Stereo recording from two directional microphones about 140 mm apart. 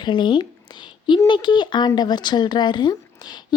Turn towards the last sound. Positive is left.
turn(degrees=30)  # may be behind; listen again after turning